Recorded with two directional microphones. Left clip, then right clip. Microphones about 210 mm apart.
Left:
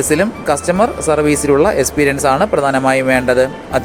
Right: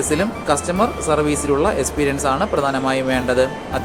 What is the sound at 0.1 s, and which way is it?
Speech, 25° left (ahead or behind).